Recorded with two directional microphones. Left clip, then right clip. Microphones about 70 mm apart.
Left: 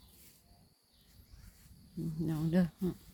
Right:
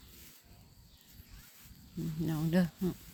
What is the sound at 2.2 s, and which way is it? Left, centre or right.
Speech, left.